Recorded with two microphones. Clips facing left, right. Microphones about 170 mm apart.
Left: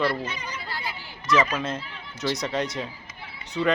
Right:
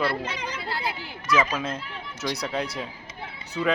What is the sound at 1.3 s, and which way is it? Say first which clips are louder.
Speech: left 1 dB; 5° right (ahead or behind).